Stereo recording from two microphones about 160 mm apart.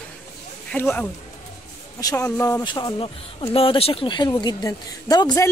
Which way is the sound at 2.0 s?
25° left (ahead or behind).